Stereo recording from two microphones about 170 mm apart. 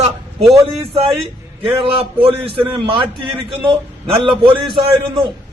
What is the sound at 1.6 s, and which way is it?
A man's voice, 35° right (ahead or behind).